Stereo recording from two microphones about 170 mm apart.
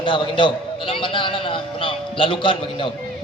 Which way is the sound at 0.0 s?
30° left (ahead or behind).